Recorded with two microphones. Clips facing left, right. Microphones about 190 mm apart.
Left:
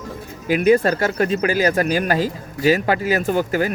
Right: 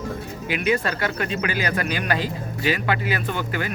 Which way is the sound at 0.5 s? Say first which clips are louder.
Left 8 dB; 40° left (ahead or behind).